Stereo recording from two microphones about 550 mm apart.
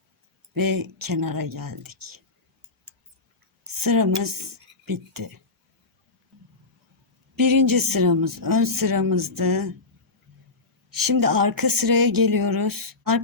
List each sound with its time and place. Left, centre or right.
0.5 s speech: right
3.6 s speech: right
7.3 s speech: right
10.9 s speech: right